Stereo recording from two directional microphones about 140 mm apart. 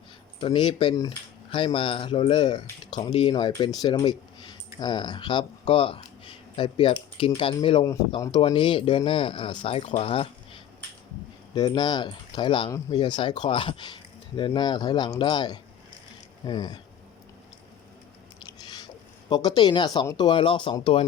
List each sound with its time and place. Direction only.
0.3 s speech: 35° left (ahead or behind)
11.5 s speech: 30° left (ahead or behind)
18.4 s biting: 30° left (ahead or behind)
19.3 s speech: 30° left (ahead or behind)